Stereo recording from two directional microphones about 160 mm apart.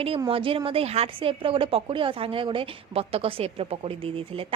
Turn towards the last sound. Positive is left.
turn(degrees=-35)  # may be behind; listen again after turning